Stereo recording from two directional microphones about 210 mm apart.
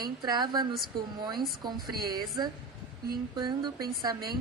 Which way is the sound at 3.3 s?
20° right (ahead or behind).